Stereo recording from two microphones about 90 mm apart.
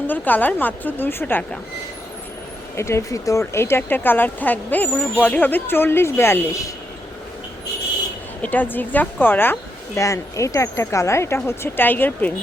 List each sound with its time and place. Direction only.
0.1 s speech: 20° left (ahead or behind)
2.7 s speech: 30° left (ahead or behind)
8.4 s speech: 20° left (ahead or behind)
9.9 s speech: 35° left (ahead or behind)